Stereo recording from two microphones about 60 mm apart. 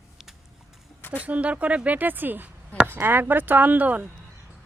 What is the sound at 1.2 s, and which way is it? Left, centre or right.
Speech, right.